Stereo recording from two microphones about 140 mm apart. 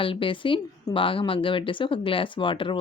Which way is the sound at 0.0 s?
40° left (ahead or behind).